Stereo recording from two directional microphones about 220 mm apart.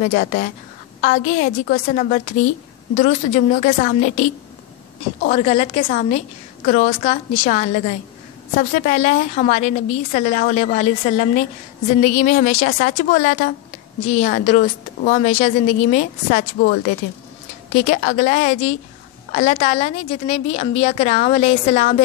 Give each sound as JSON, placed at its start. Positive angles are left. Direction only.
{"t": 0.0, "sound": "a woman's voice", "side_deg": 40}